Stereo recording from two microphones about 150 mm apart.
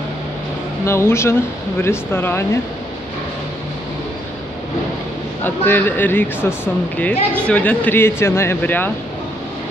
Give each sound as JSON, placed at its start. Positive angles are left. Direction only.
{"t": 0.8, "sound": "speech", "side_deg": 15}
{"t": 5.4, "sound": "speech", "side_deg": 10}